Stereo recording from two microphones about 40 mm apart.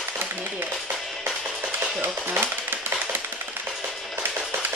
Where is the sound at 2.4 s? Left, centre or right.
Right.